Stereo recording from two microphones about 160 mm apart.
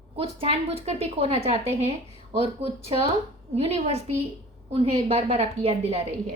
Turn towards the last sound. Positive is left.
turn(degrees=-40)  # may be behind; listen again after turning